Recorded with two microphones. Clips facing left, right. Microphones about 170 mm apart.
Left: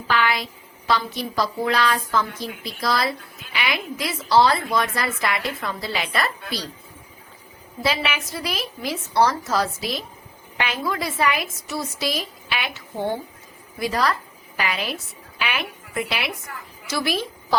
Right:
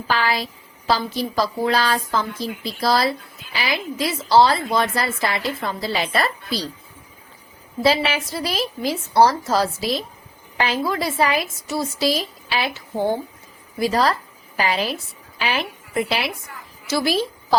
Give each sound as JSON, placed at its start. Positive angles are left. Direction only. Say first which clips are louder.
{"t": 0.1, "sound": "speech", "louder": "even", "side_deg": -35}
{"t": 7.9, "sound": "a woman's voice", "louder": "right 5 dB", "side_deg": -30}